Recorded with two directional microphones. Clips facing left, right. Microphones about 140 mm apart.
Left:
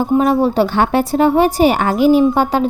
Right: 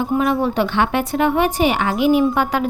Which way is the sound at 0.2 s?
30° left (ahead or behind).